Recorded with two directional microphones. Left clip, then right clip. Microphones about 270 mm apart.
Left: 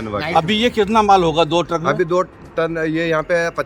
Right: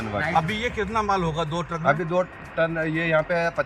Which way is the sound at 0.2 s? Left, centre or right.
Left.